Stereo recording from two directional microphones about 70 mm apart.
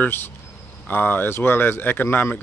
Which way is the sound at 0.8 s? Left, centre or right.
Left.